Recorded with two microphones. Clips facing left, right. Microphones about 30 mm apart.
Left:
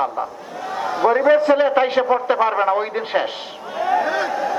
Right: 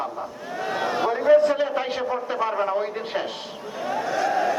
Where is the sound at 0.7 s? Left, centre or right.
Centre.